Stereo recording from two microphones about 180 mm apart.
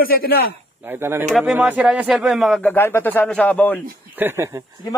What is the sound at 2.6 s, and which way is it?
A man's voice, 10° left (ahead or behind).